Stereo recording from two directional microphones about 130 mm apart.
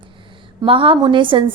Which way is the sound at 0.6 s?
40° right (ahead or behind).